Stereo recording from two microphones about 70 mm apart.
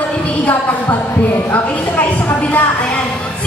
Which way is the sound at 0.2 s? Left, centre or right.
Left.